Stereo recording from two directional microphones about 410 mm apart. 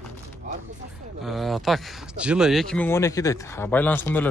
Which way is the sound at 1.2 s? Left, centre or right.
Centre.